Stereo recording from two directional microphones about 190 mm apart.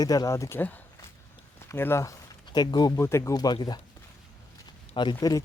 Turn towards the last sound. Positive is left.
turn(degrees=20)  # may be behind; listen again after turning